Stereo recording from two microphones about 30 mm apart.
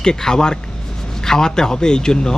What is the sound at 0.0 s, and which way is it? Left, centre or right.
A man's voice, left.